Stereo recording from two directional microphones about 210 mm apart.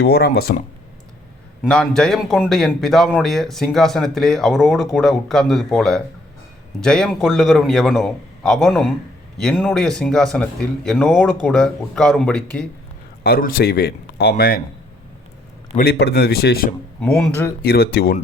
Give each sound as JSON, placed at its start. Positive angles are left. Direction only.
{"t": 0.0, "sound": "speech", "side_deg": 45}
{"t": 1.6, "sound": "speech", "side_deg": 5}
{"t": 13.2, "sound": "speech", "side_deg": 45}
{"t": 15.8, "sound": "speech", "side_deg": 50}
{"t": 17.0, "sound": "speech", "side_deg": 5}
{"t": 17.6, "sound": "speech", "side_deg": 50}